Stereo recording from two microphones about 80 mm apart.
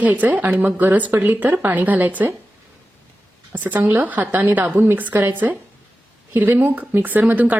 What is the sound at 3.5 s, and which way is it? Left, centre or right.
Speech, right.